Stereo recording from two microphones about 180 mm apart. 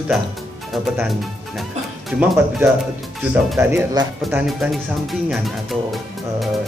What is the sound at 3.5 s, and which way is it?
Speech, 20° right (ahead or behind).